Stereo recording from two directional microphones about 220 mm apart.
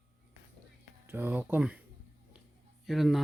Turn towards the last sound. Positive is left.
turn(degrees=0)  # may be behind; listen again after turning